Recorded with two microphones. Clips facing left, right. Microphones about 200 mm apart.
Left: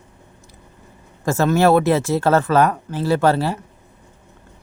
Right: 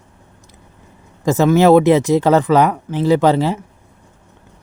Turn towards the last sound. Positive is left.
turn(degrees=-15)  # may be behind; listen again after turning